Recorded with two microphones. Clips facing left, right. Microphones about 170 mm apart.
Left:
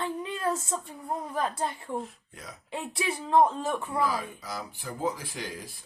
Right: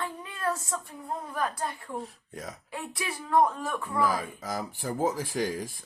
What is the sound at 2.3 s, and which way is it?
Speech, 40° right (ahead or behind).